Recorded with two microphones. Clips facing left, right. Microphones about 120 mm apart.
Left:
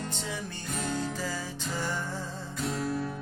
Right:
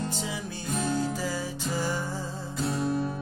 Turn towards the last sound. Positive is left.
turn(degrees=-25)  # may be behind; listen again after turning